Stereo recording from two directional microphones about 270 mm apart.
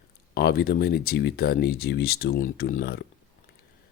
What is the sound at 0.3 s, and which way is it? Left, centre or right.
Speech, left.